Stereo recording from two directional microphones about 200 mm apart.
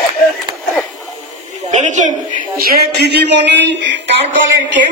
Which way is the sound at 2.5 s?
50° right (ahead or behind).